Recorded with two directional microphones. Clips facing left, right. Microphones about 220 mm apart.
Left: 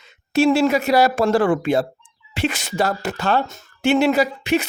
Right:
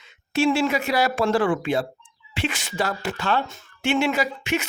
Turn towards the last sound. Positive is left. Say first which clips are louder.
# left 6 dB
turn(degrees=35)  # may be behind; listen again after turning